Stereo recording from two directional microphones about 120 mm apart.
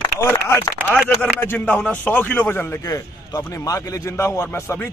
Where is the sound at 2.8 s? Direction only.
30° left (ahead or behind).